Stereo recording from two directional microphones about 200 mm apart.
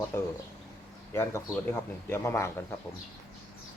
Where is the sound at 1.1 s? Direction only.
15° left (ahead or behind).